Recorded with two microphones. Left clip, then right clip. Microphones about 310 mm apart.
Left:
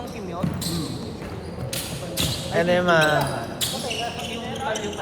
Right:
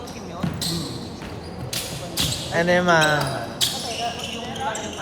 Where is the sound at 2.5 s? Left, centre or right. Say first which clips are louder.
Right 1 dB; right.